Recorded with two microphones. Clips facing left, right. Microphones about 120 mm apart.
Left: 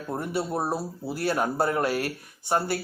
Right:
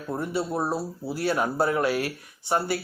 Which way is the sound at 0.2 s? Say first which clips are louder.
Right 1 dB; 50° left (ahead or behind).